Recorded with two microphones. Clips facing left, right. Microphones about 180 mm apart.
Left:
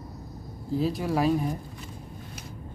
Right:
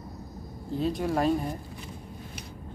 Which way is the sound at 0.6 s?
5° left (ahead or behind).